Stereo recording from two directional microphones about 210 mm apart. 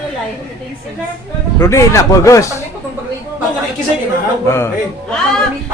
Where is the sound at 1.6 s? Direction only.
15° left (ahead or behind).